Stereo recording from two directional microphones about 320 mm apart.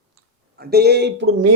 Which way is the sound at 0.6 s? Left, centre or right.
Right.